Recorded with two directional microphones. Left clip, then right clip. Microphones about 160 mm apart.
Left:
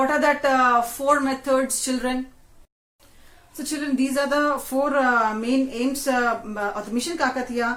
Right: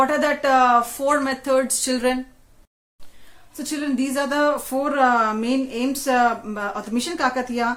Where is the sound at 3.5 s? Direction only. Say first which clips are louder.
Even; 40° right (ahead or behind).